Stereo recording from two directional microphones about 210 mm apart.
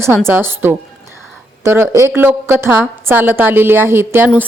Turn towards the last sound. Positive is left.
turn(degrees=-10)  # may be behind; listen again after turning